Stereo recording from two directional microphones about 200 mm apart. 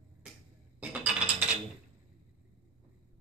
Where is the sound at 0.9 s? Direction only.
5° right (ahead or behind).